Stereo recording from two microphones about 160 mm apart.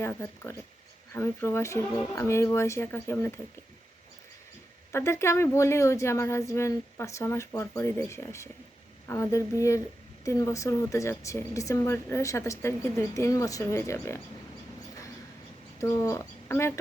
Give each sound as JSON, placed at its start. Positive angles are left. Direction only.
{"t": 0.0, "sound": "a woman's voice", "side_deg": 15}
{"t": 4.9, "sound": "a woman's voice", "side_deg": 15}
{"t": 15.8, "sound": "speech", "side_deg": 20}